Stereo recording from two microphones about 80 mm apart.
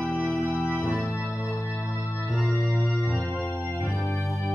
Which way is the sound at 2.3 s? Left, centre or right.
Centre.